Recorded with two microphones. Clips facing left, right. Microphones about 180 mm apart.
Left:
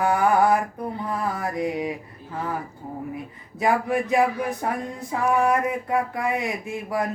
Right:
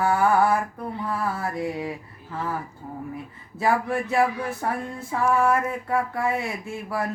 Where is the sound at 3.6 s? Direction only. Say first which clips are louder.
Left 1 dB; 15° left (ahead or behind).